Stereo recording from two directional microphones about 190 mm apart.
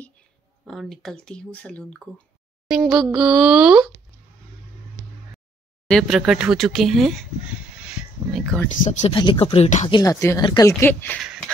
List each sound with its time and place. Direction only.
0.7 s speech: centre (ahead or behind)
5.9 s speech: centre (ahead or behind)
7.8 s a sound: centre (ahead or behind)
8.8 s speech: 35° left (ahead or behind)
9.8 s speech: 20° left (ahead or behind)